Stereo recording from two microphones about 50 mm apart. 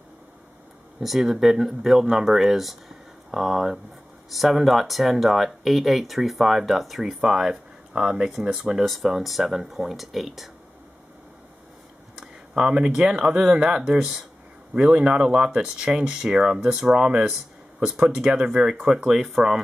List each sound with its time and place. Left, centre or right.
0.9 s speech: centre
8.6 s speech: centre
12.2 s speech: centre
19.2 s speech: centre